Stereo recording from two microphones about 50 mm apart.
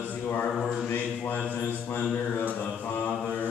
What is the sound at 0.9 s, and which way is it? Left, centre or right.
Mantra, left.